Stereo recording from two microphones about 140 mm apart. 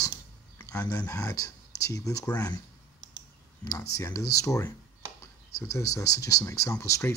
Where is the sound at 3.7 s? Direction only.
20° left (ahead or behind).